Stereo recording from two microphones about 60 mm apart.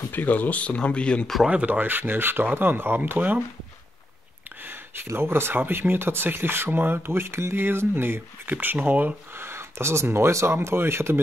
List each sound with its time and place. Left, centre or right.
0.1 s speech: left
1.5 s speech: right
4.6 s a sound: right
5.0 s speech: right
9.3 s speech: right